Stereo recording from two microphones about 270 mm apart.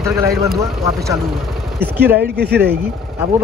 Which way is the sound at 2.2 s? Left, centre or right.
Right.